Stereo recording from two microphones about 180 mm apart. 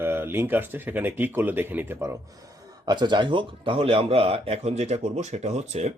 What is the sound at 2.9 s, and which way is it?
Speech, 25° right (ahead or behind).